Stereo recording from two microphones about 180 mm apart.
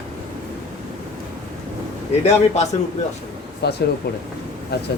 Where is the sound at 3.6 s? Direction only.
65° left (ahead or behind).